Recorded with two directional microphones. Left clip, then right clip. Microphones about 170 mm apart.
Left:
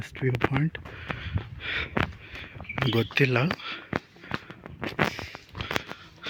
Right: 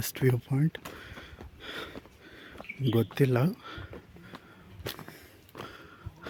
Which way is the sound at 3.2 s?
25° right (ahead or behind).